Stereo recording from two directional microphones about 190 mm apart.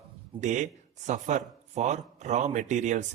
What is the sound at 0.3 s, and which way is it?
A man's voice, 40° right (ahead or behind).